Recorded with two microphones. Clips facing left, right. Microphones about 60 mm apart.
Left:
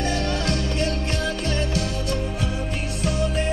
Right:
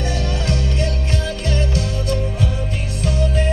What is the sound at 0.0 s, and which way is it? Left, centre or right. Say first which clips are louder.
Music: right 1 dB; left.